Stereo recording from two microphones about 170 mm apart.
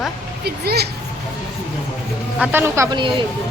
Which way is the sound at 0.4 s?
70° right (ahead or behind).